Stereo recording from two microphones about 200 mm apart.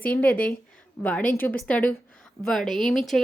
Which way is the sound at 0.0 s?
5° left (ahead or behind).